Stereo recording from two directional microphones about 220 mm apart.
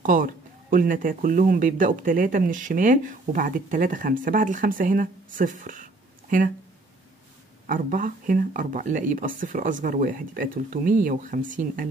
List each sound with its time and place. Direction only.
0.0 s speech: 35° right (ahead or behind)
7.6 s speech: 35° right (ahead or behind)